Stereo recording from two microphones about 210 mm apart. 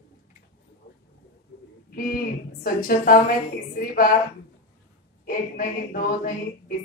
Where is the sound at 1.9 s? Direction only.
45° left (ahead or behind).